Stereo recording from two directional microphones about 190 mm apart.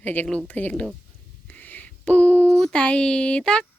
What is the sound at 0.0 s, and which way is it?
Speech, 10° left (ahead or behind).